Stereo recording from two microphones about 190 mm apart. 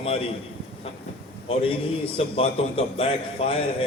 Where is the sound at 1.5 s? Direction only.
30° left (ahead or behind).